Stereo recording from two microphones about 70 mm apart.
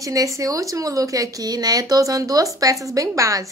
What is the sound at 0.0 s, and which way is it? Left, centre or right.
Speech, right.